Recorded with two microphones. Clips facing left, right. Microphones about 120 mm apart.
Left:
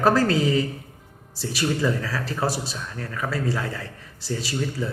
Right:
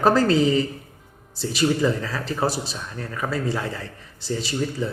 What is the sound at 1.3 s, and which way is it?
Speech, centre (ahead or behind).